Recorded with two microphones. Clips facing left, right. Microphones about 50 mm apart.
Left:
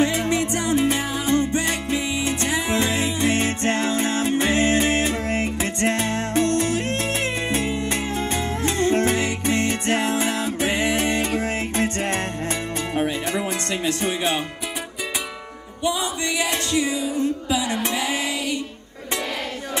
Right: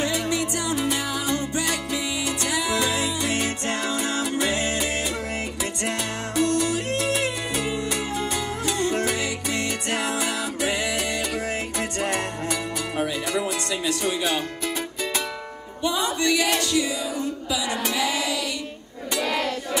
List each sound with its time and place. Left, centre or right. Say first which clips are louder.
0.0 s music: left 4 dB; left
13.8 s music: left 2 dB; left
16.2 s music: right 2 dB; left